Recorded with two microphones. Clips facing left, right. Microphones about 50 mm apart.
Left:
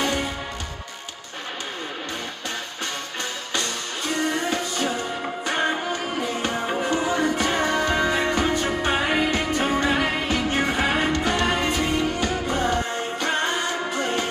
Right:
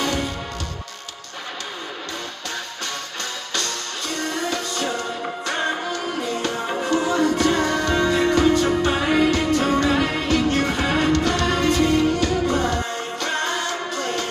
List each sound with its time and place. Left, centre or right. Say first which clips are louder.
0.0 s music: right 1 dB; centre
3.5 s music: even; centre